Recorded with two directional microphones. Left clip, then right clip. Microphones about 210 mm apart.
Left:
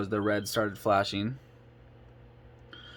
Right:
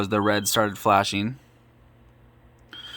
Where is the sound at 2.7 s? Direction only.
20° right (ahead or behind).